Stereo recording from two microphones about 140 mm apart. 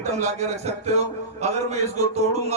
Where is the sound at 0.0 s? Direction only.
55° right (ahead or behind).